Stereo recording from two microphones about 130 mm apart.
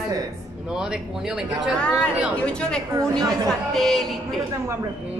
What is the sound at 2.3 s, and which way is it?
Speech, 5° left (ahead or behind).